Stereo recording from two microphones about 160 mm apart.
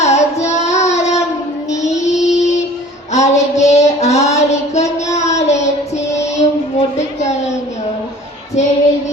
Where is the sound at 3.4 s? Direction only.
45° left (ahead or behind).